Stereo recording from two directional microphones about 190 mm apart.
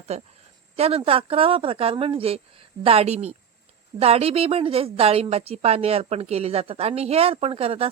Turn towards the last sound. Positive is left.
turn(degrees=-30)  # may be behind; listen again after turning